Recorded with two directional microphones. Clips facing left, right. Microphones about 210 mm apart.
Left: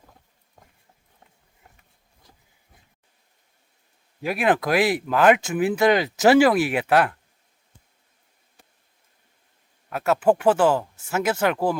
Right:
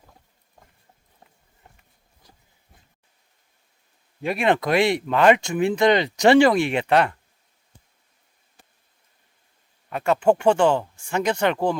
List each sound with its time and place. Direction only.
4.2 s speech: 5° left (ahead or behind)
9.9 s speech: 5° left (ahead or behind)